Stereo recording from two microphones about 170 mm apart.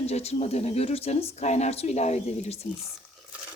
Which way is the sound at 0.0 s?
40° left (ahead or behind).